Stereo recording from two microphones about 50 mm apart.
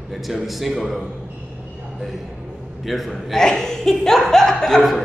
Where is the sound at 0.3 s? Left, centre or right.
Centre.